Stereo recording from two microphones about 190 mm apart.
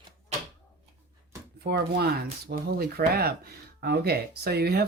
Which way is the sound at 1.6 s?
55° right (ahead or behind).